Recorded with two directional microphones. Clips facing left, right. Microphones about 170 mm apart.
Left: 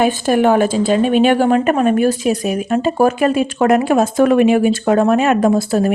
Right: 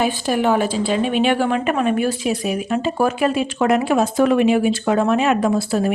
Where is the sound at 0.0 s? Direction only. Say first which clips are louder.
Left 5 dB; 50° left (ahead or behind).